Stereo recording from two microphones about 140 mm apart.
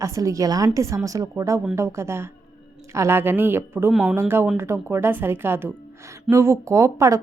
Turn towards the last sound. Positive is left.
turn(degrees=-20)  # may be behind; listen again after turning